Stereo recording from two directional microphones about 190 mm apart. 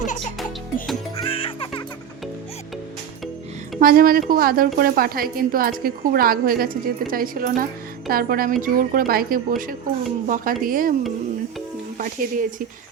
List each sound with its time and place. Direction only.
1.2 s music: 30° left (ahead or behind)
3.8 s a woman's voice: 50° right (ahead or behind)
11.9 s a woman's voice: 45° right (ahead or behind)